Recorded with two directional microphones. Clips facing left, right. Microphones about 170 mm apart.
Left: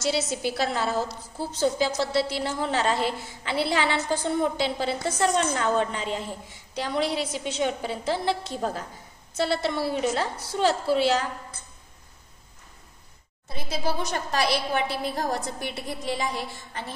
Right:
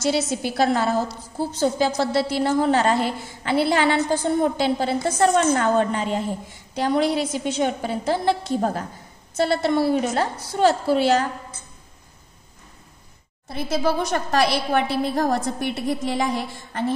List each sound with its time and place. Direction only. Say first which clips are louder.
0.0 s a woman's voice: right 4 dB; 50° right (ahead or behind)
13.5 s a woman's voice: right 7 dB; 65° right (ahead or behind)